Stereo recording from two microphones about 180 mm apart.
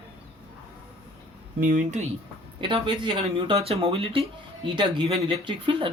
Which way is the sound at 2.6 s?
25° right (ahead or behind).